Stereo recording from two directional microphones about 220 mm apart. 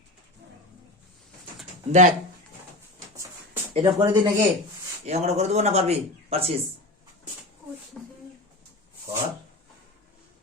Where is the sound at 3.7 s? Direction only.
20° right (ahead or behind).